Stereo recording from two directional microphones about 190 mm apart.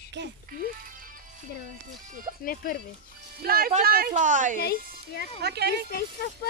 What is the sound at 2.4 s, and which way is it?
Speech, 50° left (ahead or behind).